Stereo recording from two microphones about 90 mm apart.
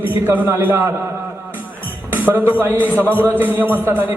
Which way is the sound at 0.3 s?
25° right (ahead or behind).